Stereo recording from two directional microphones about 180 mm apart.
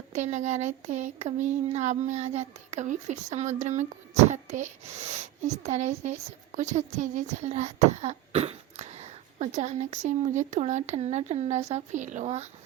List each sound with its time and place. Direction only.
0.1 s speech: 40° right (ahead or behind)